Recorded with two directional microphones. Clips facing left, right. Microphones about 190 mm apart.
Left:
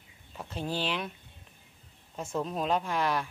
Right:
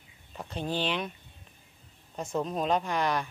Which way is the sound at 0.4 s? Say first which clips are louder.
Right 2 dB; 5° left (ahead or behind).